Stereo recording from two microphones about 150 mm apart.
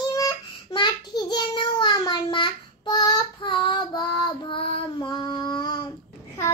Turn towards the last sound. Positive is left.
turn(degrees=25)  # may be behind; listen again after turning